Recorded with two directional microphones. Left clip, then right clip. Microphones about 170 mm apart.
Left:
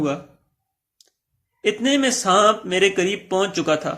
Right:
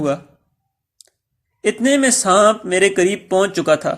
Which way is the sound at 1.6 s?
35° right (ahead or behind).